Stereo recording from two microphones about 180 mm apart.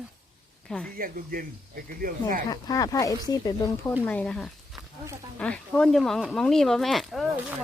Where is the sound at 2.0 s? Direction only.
50° right (ahead or behind).